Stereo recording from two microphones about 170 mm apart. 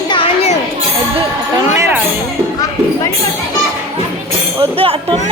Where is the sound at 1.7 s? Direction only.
15° right (ahead or behind).